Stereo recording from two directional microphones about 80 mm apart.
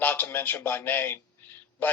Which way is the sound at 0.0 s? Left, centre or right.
Left.